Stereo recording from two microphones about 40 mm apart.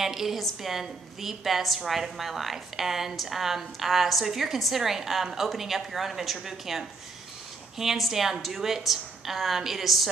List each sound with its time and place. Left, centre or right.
0.0 s a woman's voice: centre